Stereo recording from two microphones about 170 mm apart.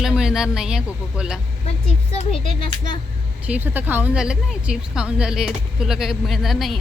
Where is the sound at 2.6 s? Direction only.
25° left (ahead or behind).